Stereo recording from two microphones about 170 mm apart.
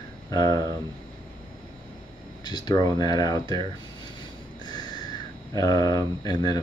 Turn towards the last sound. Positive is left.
turn(degrees=25)  # may be behind; listen again after turning